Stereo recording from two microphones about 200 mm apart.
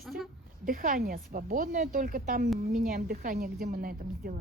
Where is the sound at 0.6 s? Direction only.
45° right (ahead or behind).